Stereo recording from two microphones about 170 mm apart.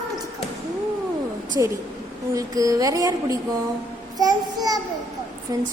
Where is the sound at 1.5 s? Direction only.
15° right (ahead or behind).